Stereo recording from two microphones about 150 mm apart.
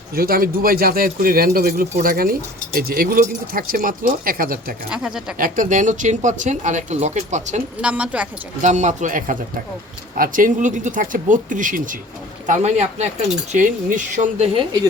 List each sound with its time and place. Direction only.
0.2 s speech: 80° right
4.9 s speech: 5° right (ahead or behind)
5.4 s speech: 60° right (ahead or behind)
7.8 s speech: 5° right (ahead or behind)
8.6 s speech: 55° right (ahead or behind)
12.5 s speech: 50° right (ahead or behind)